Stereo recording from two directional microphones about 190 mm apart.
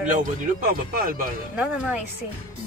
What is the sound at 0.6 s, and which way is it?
Speech, 50° right (ahead or behind).